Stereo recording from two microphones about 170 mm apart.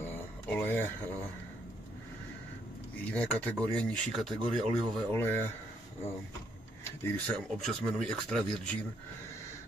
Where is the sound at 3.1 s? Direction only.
10° left (ahead or behind).